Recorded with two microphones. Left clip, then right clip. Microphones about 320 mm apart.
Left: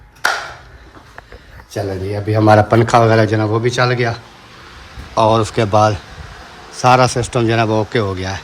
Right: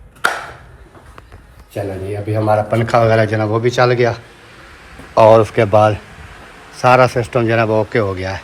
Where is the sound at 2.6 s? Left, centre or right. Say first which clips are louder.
Left 2 dB; centre.